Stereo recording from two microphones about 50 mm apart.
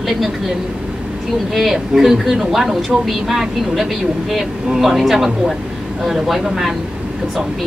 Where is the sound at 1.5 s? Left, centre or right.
Centre.